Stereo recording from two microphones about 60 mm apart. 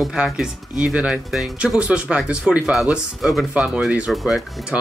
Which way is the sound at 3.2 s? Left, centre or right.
Centre.